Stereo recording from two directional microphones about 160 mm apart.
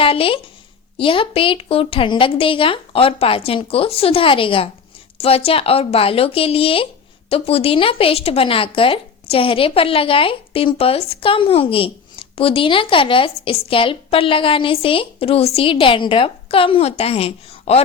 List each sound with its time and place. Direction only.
0.0 s speech: 35° left (ahead or behind)